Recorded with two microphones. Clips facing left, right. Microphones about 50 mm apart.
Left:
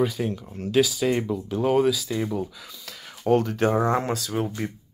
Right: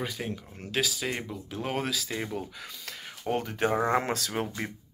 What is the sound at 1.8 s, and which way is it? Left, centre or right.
Speech, right.